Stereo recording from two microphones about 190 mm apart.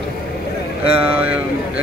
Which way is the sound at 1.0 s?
10° right (ahead or behind).